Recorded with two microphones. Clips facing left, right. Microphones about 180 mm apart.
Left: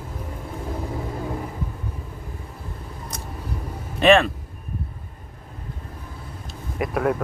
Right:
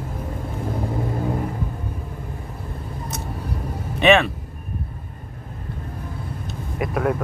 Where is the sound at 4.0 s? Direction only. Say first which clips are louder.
Even; centre (ahead or behind).